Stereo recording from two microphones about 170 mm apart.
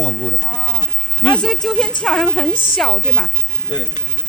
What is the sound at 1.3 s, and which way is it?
Speech, centre (ahead or behind).